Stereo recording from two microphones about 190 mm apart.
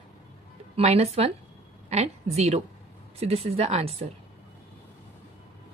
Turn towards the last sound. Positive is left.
turn(degrees=-35)  # may be behind; listen again after turning